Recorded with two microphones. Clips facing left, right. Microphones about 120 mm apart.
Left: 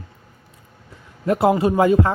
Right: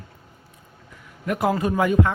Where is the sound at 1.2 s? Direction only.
30° left (ahead or behind).